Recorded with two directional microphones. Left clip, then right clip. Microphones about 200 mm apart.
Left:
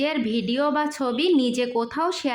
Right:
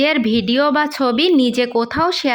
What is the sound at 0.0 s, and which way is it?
A woman's voice, 30° right (ahead or behind).